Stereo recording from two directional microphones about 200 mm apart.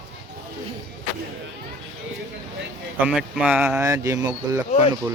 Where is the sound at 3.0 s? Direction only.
5° right (ahead or behind).